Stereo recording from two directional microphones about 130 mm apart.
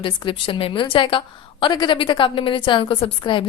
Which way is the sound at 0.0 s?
40° left (ahead or behind).